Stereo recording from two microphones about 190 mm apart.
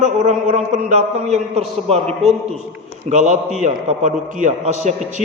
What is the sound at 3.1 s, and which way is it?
A man's voice, 40° right (ahead or behind).